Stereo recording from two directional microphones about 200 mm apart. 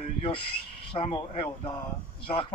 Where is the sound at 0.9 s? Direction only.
25° left (ahead or behind).